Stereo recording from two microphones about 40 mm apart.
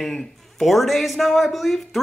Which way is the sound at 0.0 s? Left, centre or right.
Centre.